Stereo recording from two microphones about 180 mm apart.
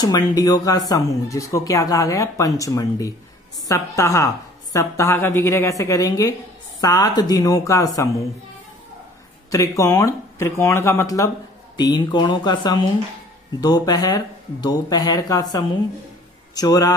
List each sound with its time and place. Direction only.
0.4 s speech: 20° left (ahead or behind)
9.5 s speech: 15° left (ahead or behind)